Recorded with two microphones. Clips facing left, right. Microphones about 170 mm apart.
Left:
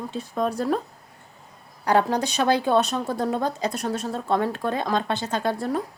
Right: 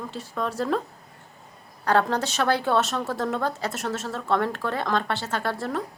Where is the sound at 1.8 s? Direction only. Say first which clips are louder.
Left 1 dB; 15° left (ahead or behind).